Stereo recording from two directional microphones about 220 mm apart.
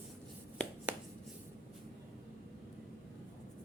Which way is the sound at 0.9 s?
10° right (ahead or behind).